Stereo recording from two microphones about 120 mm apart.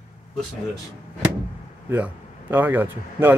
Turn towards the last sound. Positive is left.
turn(degrees=-15)  # may be behind; listen again after turning